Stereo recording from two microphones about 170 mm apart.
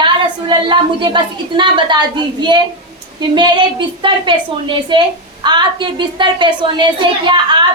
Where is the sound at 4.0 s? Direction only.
30° right (ahead or behind).